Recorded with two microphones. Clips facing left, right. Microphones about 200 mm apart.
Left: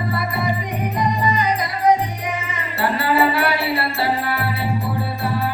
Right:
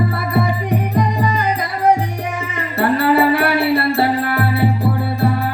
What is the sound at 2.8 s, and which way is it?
Music, 55° right (ahead or behind).